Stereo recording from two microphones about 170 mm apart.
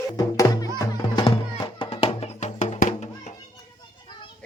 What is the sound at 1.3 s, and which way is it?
Music, 30° left (ahead or behind).